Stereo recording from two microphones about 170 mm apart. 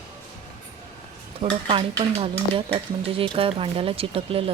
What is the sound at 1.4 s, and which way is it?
Speech, 30° right (ahead or behind).